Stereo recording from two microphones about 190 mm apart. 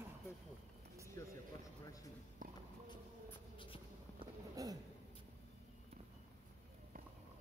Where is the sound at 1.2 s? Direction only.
15° left (ahead or behind).